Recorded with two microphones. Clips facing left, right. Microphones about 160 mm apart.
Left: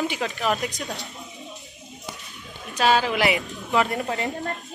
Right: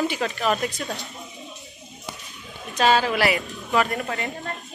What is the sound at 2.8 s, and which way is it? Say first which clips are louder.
A woman's voice: right 1 dB; 15° left (ahead or behind).